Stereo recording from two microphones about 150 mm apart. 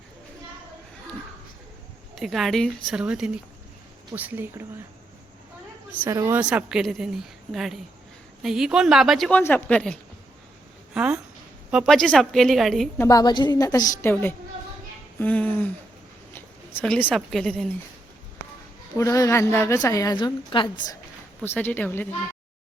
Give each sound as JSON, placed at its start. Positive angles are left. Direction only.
{"t": 2.1, "sound": "a woman's voice", "side_deg": 0}
{"t": 6.0, "sound": "a woman's voice", "side_deg": -20}
{"t": 6.4, "sound": "a woman's voice", "side_deg": -5}
{"t": 9.3, "sound": "speech", "side_deg": 15}
{"t": 10.9, "sound": "a woman's voice", "side_deg": -5}
{"t": 13.0, "sound": "a woman's voice", "side_deg": 25}
{"t": 14.1, "sound": "speech", "side_deg": 15}
{"t": 16.8, "sound": "a woman's voice", "side_deg": 5}
{"t": 18.9, "sound": "a woman's voice", "side_deg": 20}
{"t": 21.4, "sound": "speech", "side_deg": 15}